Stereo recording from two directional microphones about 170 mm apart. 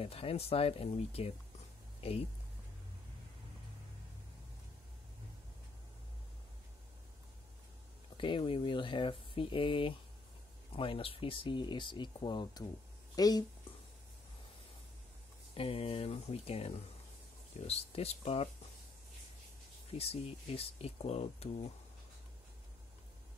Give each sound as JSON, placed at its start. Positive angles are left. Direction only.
{"t": 0.0, "sound": "speech", "side_deg": 35}
{"t": 2.0, "sound": "music", "side_deg": 35}
{"t": 8.2, "sound": "speech", "side_deg": 30}
{"t": 15.5, "sound": "speech", "side_deg": 35}
{"t": 19.9, "sound": "speech", "side_deg": 35}